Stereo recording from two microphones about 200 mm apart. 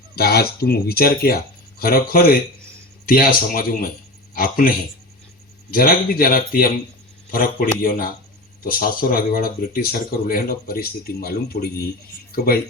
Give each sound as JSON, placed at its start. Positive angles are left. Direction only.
{"t": 0.2, "sound": "speech", "side_deg": 50}
{"t": 5.7, "sound": "speech", "side_deg": 45}